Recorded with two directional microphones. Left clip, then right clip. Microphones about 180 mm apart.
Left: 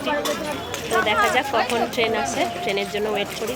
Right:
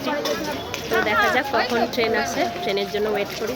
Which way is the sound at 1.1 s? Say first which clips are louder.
Right 1 dB; centre (ahead or behind).